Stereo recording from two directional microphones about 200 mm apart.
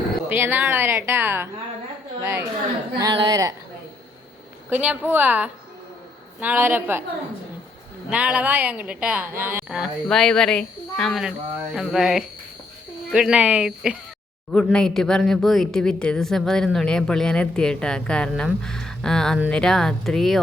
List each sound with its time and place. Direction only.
0.3 s a woman's voice: 10° right (ahead or behind)
4.7 s a woman's voice: 10° right (ahead or behind)
8.1 s a woman's voice: 5° right (ahead or behind)